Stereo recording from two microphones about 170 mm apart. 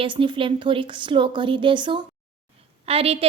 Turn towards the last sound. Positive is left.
turn(degrees=-35)  # may be behind; listen again after turning